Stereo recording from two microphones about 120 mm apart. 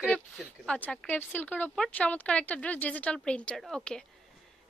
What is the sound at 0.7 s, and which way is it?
A woman's voice, 15° left (ahead or behind).